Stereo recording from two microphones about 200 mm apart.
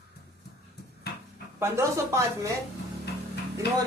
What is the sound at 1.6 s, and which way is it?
Speech, 15° right (ahead or behind).